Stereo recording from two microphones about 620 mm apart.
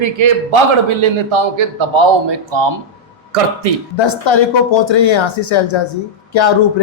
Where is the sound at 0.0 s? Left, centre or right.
Right.